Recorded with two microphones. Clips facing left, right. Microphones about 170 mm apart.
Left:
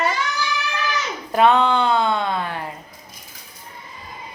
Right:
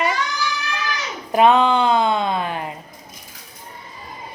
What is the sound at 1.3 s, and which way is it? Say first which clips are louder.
Speech: right 2 dB; 15° right (ahead or behind).